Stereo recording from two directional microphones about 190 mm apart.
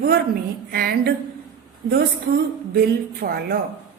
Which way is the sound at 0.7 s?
55° right (ahead or behind).